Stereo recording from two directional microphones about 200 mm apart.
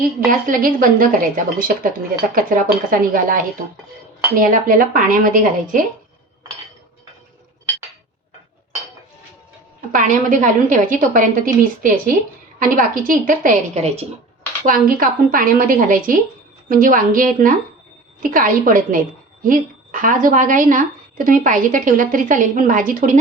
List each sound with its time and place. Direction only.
0.3 s a woman's voice: 45° right (ahead or behind)
9.9 s a woman's voice: 40° right (ahead or behind)
14.7 s a woman's voice: 45° right (ahead or behind)